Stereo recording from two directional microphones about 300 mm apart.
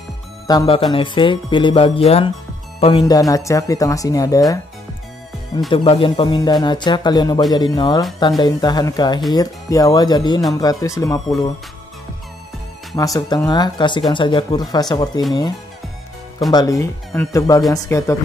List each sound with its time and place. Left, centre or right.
0.5 s speech: centre
5.7 s speech: centre
12.9 s speech: centre
16.5 s speech: centre